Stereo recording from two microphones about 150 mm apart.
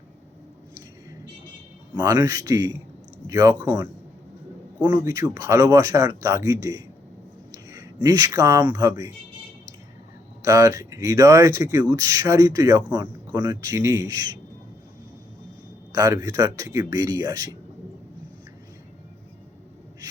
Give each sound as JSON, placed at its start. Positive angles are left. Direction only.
{"t": 2.0, "sound": "speech", "side_deg": -25}
{"t": 10.4, "sound": "speech", "side_deg": -20}
{"t": 15.9, "sound": "speech", "side_deg": -25}